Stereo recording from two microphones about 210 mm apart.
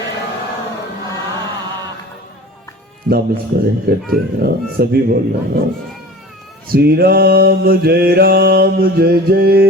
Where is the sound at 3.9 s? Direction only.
45° right (ahead or behind).